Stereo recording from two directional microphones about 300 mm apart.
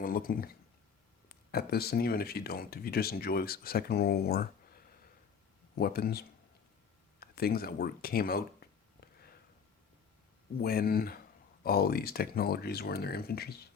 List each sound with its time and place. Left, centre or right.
0.0 s speech: left
5.7 s speech: left
10.6 s speech: left